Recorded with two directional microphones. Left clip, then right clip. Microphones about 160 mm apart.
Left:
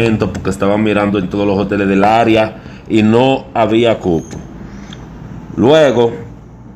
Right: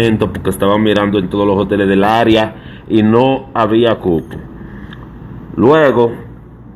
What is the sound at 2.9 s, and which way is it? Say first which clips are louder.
Speech: even; 40° left (ahead or behind).